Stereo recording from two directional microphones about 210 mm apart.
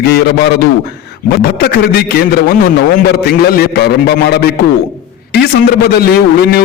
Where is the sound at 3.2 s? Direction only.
45° left (ahead or behind).